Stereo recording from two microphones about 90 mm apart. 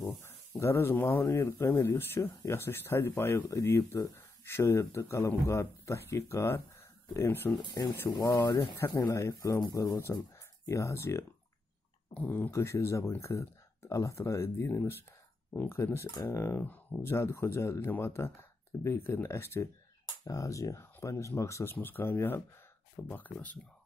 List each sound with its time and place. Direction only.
0.1 s a sound: 20° left (ahead or behind)
0.6 s speech: 30° left (ahead or behind)
7.8 s speech: 40° left (ahead or behind)
12.2 s speech: 20° left (ahead or behind)
12.5 s speech: 35° left (ahead or behind)
15.8 s speech: 30° left (ahead or behind)
20.2 s speech: 40° left (ahead or behind); by 23.6 s 20° left (ahead or behind)